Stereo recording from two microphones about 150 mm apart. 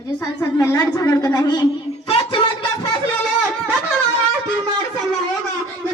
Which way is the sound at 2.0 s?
35° left (ahead or behind).